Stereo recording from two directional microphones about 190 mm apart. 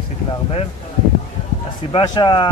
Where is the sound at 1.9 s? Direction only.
20° left (ahead or behind).